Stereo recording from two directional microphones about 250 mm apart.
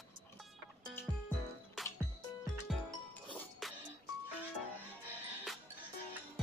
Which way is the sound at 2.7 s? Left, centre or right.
Centre.